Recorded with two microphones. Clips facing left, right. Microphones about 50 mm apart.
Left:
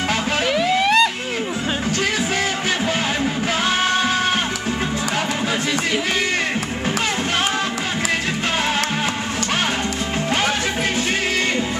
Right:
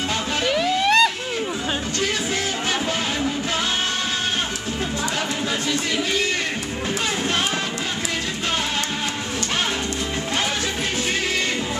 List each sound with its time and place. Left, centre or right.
0.6 s vehicle: centre